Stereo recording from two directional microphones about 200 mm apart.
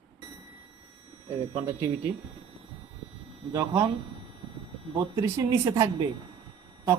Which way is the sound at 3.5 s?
20° right (ahead or behind).